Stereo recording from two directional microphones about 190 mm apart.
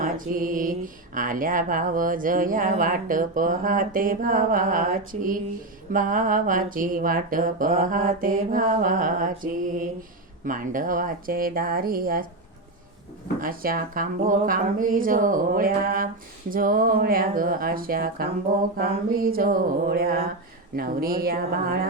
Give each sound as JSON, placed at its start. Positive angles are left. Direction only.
{"t": 0.0, "sound": "mantra", "side_deg": -45}
{"t": 13.4, "sound": "mantra", "side_deg": -50}